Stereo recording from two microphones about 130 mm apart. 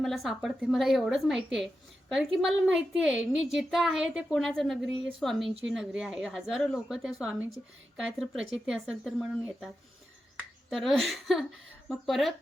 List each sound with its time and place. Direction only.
0.0 s a woman's voice: centre (ahead or behind)
10.7 s a woman's voice: centre (ahead or behind)